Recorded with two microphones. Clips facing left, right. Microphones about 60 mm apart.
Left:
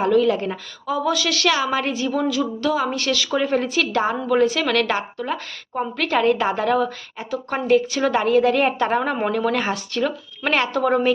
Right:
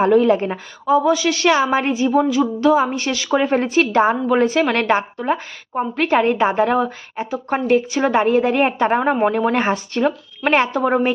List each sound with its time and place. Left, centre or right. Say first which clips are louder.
0.0 s a woman's voice: right 4 dB; right
3.3 s a woman's voice: right 6 dB; right